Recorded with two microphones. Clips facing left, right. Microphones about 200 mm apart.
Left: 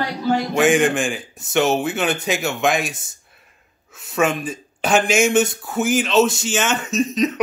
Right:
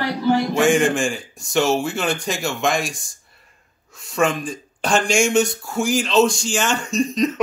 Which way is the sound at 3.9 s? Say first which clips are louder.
Even; centre (ahead or behind).